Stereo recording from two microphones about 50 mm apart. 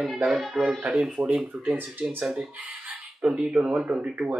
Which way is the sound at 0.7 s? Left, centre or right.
Right.